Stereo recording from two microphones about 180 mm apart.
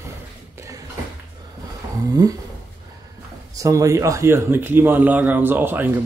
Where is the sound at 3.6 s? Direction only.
15° right (ahead or behind).